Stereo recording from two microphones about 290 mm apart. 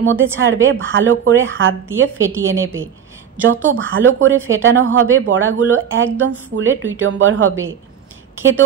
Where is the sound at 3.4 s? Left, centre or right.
Right.